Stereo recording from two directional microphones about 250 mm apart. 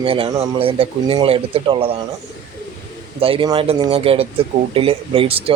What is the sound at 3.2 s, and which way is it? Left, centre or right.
Speech, right.